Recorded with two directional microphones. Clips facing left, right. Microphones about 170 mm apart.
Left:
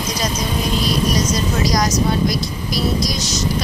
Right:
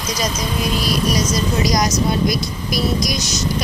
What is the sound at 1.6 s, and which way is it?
Speech, 15° right (ahead or behind).